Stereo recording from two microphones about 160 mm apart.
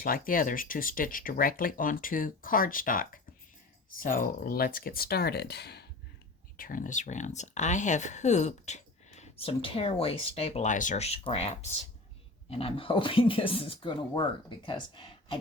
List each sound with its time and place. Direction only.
0.0 s speech: 60° left (ahead or behind); by 5.8 s 90° left
6.6 s speech: 60° left (ahead or behind); by 15.4 s 30° left (ahead or behind)